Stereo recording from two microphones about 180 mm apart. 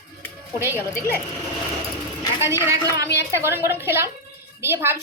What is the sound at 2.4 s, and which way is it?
A woman's voice, 15° right (ahead or behind).